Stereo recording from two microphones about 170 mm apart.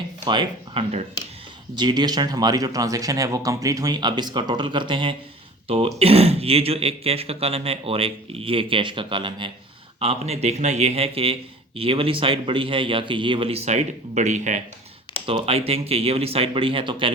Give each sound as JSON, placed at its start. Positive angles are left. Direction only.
{"t": 0.3, "sound": "speech", "side_deg": -30}
{"t": 1.7, "sound": "speech", "side_deg": -25}